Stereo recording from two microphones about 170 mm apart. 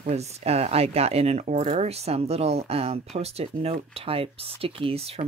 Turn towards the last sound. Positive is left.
turn(degrees=-35)  # may be behind; listen again after turning